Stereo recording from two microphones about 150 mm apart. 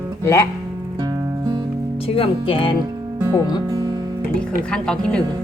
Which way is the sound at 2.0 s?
40° left (ahead or behind).